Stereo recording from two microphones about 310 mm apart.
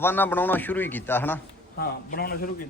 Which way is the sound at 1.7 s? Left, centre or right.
Left.